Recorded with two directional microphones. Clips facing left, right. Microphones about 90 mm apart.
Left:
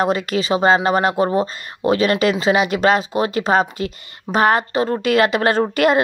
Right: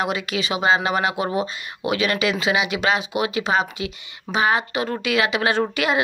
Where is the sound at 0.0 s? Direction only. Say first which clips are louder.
Left 5 dB; 40° left (ahead or behind).